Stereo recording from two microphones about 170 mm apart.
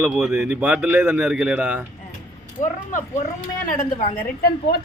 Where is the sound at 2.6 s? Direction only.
50° left (ahead or behind).